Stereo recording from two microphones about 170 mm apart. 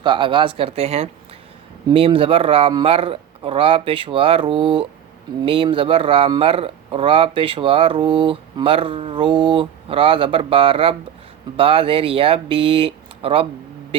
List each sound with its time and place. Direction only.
0.0 s speech: 30° right (ahead or behind)